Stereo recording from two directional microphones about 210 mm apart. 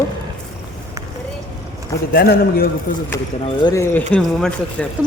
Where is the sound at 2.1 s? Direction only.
45° left (ahead or behind).